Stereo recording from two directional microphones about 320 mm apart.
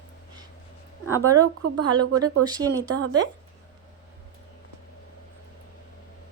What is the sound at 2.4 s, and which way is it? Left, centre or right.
Speech, centre.